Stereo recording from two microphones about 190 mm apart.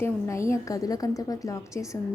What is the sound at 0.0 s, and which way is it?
A woman's voice, 15° left (ahead or behind).